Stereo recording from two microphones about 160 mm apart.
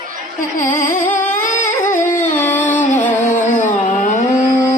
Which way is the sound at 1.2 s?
55° left (ahead or behind).